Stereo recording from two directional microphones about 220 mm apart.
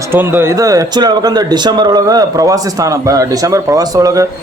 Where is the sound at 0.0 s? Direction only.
10° right (ahead or behind).